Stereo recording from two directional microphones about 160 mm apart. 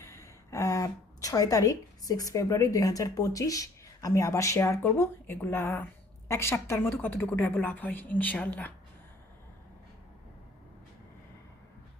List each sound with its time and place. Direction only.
0.0 s a woman's voice: 20° left (ahead or behind)